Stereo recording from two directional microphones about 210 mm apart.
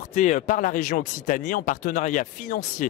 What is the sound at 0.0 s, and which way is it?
Speech, 35° left (ahead or behind).